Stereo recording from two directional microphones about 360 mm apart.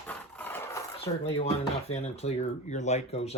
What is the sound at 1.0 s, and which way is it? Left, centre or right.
Speech, centre.